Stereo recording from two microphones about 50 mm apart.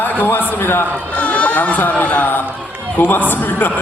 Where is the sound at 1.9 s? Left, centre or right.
Left.